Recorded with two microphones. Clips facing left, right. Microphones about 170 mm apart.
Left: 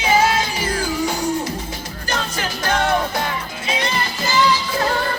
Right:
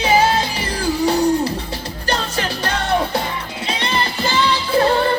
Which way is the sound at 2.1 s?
35° right (ahead or behind).